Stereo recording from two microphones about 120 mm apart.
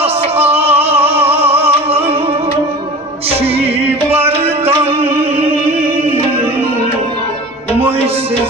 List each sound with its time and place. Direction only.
0.0 s music: 55° right (ahead or behind)
3.3 s music: 55° right (ahead or behind)